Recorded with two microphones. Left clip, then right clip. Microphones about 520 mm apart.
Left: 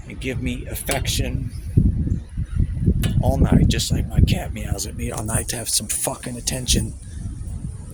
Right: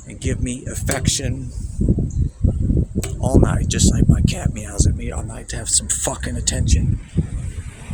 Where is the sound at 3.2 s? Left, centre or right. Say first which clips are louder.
Right 3 dB; left.